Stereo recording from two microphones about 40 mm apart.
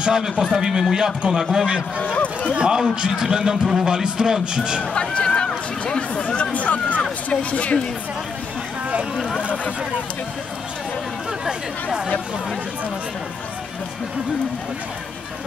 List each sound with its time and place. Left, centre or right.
0.0 s a man's voice: centre
2.0 s speech: left
2.7 s a man's voice: centre
4.9 s run: left
5.9 s speech: left
6.5 s a sound: left
7.2 s speech: left